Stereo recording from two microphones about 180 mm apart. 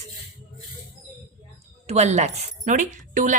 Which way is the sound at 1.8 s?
40° right (ahead or behind).